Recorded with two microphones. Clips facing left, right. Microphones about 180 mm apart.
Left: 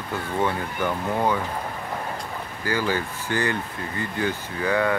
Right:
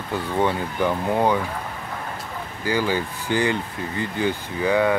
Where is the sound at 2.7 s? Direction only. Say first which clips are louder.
Right 2 dB; 15° right (ahead or behind).